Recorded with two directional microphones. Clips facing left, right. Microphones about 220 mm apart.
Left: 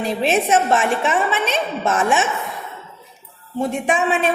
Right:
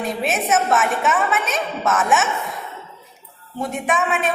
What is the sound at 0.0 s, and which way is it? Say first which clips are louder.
A woman's voice: left 4 dB; 30° left (ahead or behind).